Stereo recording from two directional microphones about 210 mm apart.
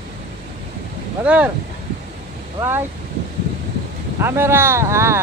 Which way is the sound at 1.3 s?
5° right (ahead or behind).